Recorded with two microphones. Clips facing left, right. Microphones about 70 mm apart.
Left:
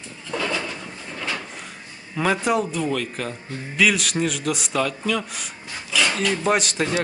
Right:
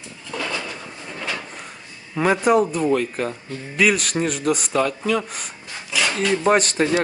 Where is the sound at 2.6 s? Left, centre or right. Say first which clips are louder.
Right 4 dB; right.